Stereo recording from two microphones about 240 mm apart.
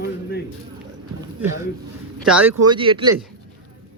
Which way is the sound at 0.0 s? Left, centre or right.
Left.